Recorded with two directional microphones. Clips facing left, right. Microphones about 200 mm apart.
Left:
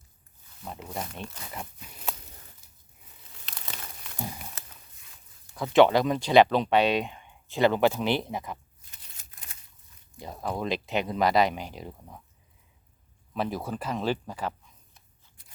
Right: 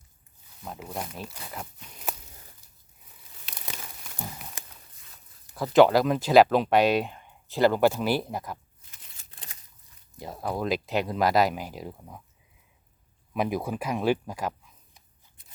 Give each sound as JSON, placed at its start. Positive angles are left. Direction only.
{"t": 0.6, "sound": "speech", "side_deg": 0}
{"t": 4.6, "sound": "walk", "side_deg": -15}
{"t": 5.5, "sound": "speech", "side_deg": 0}
{"t": 10.2, "sound": "speech", "side_deg": -5}
{"t": 13.3, "sound": "speech", "side_deg": -15}
{"t": 15.4, "sound": "scissors", "side_deg": -20}